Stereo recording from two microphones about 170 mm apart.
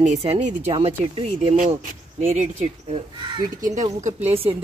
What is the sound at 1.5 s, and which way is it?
Speech, 50° right (ahead or behind).